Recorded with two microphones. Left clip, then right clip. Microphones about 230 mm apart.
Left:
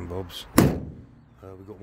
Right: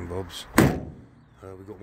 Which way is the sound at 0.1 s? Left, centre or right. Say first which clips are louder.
Left 1 dB; centre.